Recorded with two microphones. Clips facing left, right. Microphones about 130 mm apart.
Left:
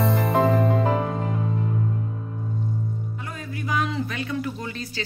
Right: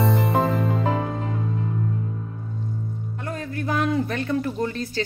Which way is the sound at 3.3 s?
60° right (ahead or behind).